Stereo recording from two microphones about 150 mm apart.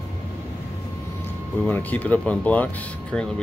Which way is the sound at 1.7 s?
10° left (ahead or behind).